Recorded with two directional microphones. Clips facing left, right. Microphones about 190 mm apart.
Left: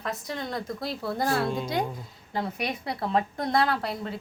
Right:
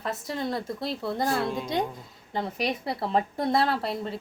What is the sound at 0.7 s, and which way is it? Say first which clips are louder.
A woman's voice: right 1 dB; centre (ahead or behind).